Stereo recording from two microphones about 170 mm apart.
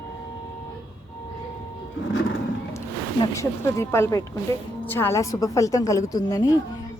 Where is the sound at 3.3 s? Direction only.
15° left (ahead or behind).